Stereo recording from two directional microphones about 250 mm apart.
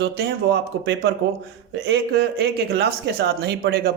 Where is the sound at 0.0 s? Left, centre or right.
Right.